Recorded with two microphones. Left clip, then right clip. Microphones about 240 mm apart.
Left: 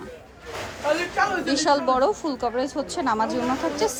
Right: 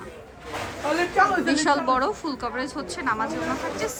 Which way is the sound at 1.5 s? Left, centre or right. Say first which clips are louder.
Left 1 dB; centre.